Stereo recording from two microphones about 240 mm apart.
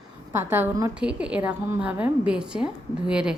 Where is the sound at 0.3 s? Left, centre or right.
Centre.